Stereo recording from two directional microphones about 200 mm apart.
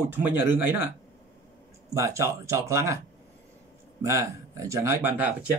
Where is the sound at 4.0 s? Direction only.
15° right (ahead or behind).